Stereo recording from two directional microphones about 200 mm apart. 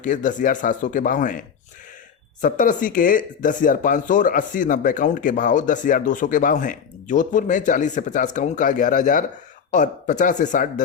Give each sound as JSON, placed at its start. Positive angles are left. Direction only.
{"t": 0.0, "sound": "speech", "side_deg": 40}